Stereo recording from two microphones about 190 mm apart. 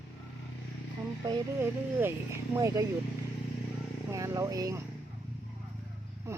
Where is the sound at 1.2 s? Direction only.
15° right (ahead or behind).